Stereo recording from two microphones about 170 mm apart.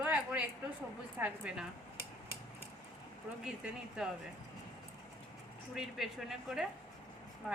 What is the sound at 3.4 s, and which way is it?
Speech, 5° right (ahead or behind).